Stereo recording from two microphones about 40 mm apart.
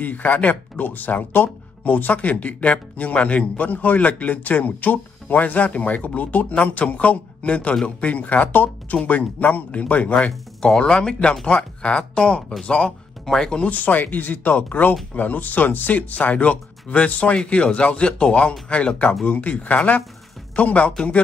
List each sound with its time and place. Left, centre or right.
0.0 s speech: left
10.8 s speech: left
13.2 s speech: centre
13.6 s speech: left
19.2 s speech: left